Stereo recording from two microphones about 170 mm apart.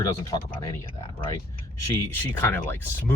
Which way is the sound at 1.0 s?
25° left (ahead or behind).